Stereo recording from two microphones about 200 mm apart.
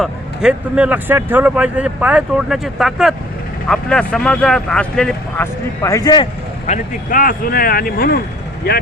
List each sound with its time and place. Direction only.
0.0 s speech: 5° right (ahead or behind)
5.8 s speech: 15° left (ahead or behind)
6.7 s speech: 45° left (ahead or behind)